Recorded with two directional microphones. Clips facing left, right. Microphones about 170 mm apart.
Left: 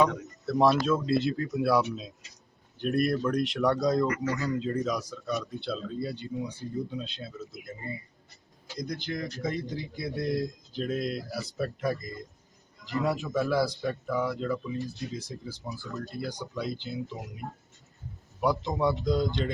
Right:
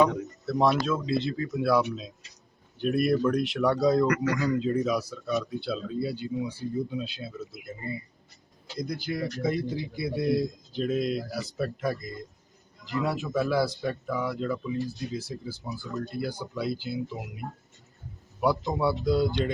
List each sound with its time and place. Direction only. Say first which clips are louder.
0.0 s speech: right 2 dB; centre (ahead or behind)
4.0 s a man's voice: right 3 dB; 70° right (ahead or behind)
4.4 s speech: right 4 dB; 10° right (ahead or behind)
8.8 s speech: right 3 dB; 5° right (ahead or behind)
18.3 s speech: right 1 dB; 5° right (ahead or behind)